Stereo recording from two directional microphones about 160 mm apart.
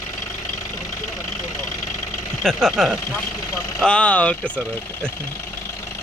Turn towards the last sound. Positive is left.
turn(degrees=10)  # may be behind; listen again after turning